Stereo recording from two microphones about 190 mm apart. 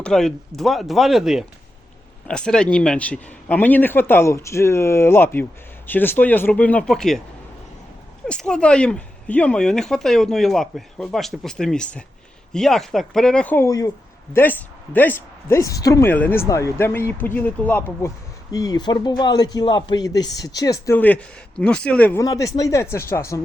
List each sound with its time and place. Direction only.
0.0 s speech: 5° left (ahead or behind)
8.3 s a man's voice: 5° left (ahead or behind)